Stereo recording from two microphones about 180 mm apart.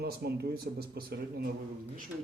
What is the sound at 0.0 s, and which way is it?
Speech, 65° right (ahead or behind).